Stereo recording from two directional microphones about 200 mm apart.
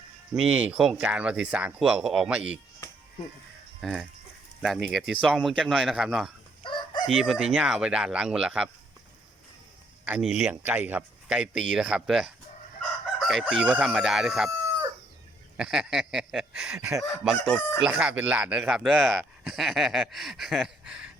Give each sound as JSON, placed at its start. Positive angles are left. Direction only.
{"t": 0.3, "sound": "speech", "side_deg": -5}
{"t": 3.8, "sound": "speech", "side_deg": 0}
{"t": 6.6, "sound": "chicken", "side_deg": 25}
{"t": 7.1, "sound": "speech", "side_deg": -5}
{"t": 10.1, "sound": "speech", "side_deg": -5}
{"t": 15.5, "sound": "speech", "side_deg": -5}